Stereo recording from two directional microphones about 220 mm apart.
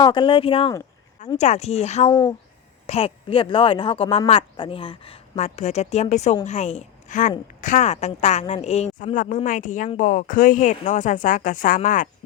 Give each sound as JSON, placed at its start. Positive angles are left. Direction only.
{"t": 0.0, "sound": "a woman's voice", "side_deg": 20}